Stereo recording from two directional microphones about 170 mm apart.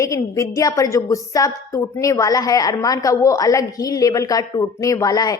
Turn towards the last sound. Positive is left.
turn(degrees=20)  # may be behind; listen again after turning